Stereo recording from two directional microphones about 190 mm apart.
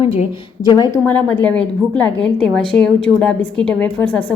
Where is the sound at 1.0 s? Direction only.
10° left (ahead or behind).